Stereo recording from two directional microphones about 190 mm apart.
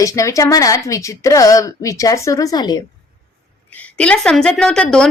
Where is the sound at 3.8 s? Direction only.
5° left (ahead or behind).